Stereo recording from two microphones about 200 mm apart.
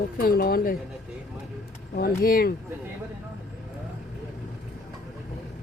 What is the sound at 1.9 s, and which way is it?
Speech, 45° left (ahead or behind).